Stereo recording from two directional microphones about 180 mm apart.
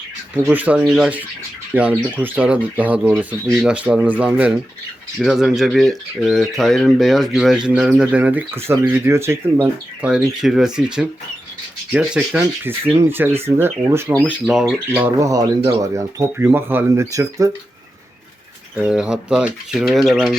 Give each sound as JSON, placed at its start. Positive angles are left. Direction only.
{"t": 0.5, "sound": "speech", "side_deg": -10}
{"t": 18.8, "sound": "speech", "side_deg": -5}